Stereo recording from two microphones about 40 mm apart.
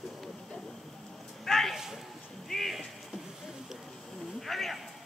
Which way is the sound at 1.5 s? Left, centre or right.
Centre.